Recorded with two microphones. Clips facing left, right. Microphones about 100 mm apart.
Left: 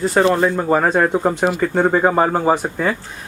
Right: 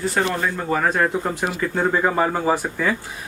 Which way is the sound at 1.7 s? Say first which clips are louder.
Left 2 dB; 35° left (ahead or behind).